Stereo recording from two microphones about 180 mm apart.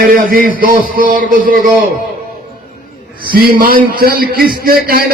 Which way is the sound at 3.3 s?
55° right (ahead or behind).